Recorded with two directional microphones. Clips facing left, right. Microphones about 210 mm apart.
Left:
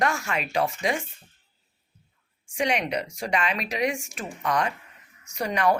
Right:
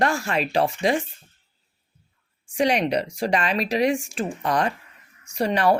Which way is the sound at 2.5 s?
35° right (ahead or behind).